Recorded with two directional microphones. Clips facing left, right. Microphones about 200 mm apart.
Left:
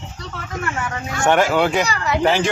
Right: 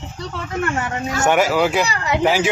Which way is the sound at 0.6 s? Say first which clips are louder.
Right 3 dB; 30° right (ahead or behind).